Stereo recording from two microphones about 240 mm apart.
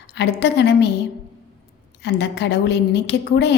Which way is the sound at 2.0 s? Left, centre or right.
Left.